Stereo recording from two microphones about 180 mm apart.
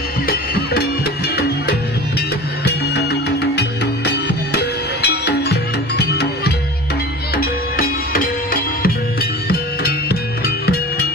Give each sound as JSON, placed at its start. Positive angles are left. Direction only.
{"t": 0.3, "sound": "music", "side_deg": 60}
{"t": 7.3, "sound": "music", "side_deg": 55}
{"t": 10.0, "sound": "music", "side_deg": 60}